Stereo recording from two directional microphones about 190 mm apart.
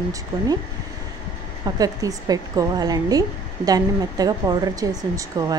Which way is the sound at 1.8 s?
20° right (ahead or behind).